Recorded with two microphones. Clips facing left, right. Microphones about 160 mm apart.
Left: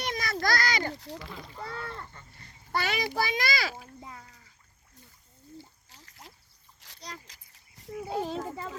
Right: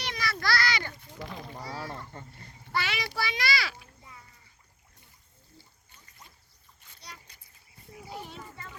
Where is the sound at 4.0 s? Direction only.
90° left.